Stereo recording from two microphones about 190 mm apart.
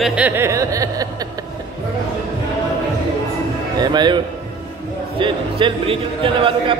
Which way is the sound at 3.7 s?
20° right (ahead or behind).